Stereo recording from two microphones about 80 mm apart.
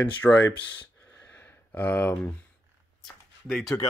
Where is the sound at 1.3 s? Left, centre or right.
Left.